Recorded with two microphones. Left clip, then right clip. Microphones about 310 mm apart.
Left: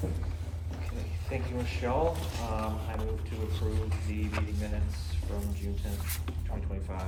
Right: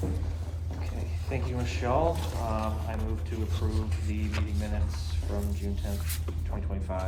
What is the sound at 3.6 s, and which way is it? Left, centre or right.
A man's voice, centre.